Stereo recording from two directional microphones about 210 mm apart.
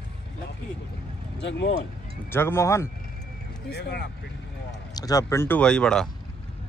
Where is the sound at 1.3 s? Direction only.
55° left (ahead or behind).